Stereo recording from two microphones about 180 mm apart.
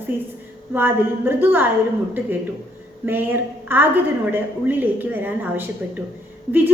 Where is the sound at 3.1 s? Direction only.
10° right (ahead or behind).